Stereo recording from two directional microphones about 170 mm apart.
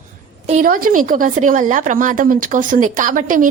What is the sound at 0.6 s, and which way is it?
A woman's voice, 55° right (ahead or behind).